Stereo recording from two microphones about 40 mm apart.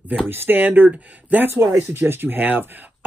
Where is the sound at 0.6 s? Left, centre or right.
Right.